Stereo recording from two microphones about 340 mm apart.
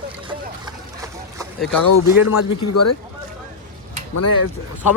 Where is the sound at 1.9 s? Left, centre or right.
Left.